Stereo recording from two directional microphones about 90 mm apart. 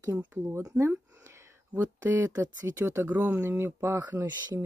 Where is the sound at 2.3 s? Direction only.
40° right (ahead or behind).